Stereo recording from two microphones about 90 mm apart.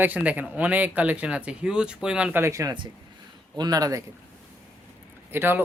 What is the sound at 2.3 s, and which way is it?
Speech, 30° right (ahead or behind).